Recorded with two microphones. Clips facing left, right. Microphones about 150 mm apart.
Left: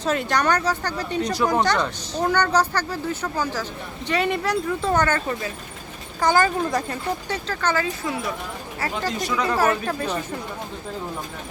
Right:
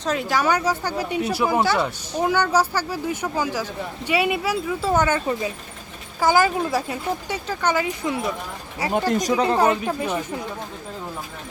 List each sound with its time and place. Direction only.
0.0 s speech: centre (ahead or behind); by 8.2 s 20° right (ahead or behind)
8.9 s speech: 50° right (ahead or behind)
9.3 s speech: 30° right (ahead or behind); by 10.2 s 15° right (ahead or behind)